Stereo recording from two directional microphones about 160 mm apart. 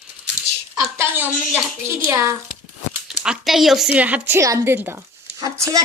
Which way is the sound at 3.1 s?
5° right (ahead or behind).